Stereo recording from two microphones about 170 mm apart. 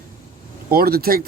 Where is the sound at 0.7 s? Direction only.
60° right (ahead or behind).